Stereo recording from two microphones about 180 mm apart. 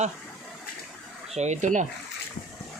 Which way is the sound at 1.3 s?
40° right (ahead or behind).